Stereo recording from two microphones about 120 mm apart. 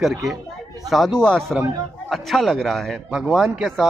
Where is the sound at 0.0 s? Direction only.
Centre (ahead or behind).